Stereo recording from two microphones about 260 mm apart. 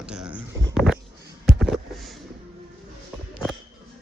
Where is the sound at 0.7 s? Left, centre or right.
Centre.